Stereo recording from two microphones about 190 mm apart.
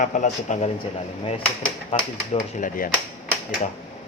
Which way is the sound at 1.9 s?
35° left (ahead or behind).